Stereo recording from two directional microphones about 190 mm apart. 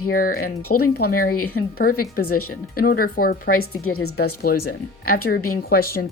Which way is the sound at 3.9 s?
75° left (ahead or behind).